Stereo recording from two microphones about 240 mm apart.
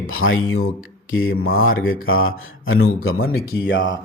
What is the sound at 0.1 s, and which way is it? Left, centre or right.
Mantra, left.